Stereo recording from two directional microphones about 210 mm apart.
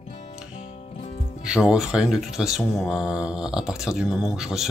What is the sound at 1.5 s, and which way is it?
Speech, 5° right (ahead or behind).